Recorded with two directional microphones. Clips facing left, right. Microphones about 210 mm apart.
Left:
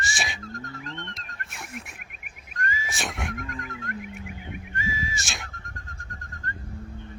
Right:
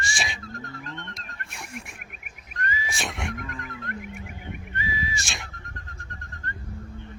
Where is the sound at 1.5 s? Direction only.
Centre (ahead or behind).